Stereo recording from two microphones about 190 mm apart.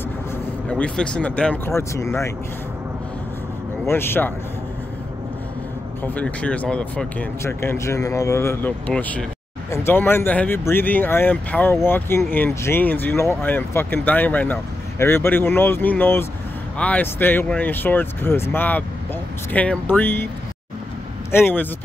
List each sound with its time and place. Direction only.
0.7 s speech: 5° left (ahead or behind)
3.8 s speech: 10° left (ahead or behind)
6.0 s speech: 5° left (ahead or behind)
21.3 s speech: 10° left (ahead or behind)